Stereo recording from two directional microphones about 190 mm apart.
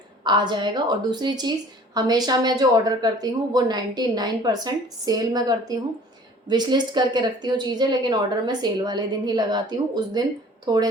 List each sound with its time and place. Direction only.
0.3 s a woman's voice: 25° right (ahead or behind)